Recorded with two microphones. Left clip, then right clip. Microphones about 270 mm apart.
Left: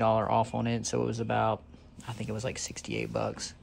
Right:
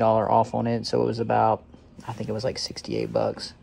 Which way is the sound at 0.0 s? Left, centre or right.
Centre.